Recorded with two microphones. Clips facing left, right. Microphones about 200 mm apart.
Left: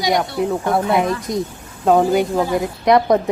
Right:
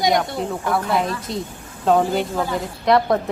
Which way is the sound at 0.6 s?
20° left (ahead or behind).